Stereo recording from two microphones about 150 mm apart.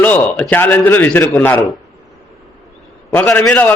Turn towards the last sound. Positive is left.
turn(degrees=10)  # may be behind; listen again after turning